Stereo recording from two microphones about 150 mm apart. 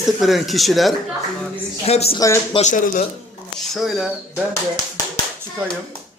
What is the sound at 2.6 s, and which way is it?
Speech, 55° left (ahead or behind).